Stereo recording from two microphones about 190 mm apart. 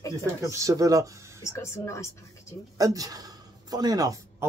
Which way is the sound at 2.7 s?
20° right (ahead or behind).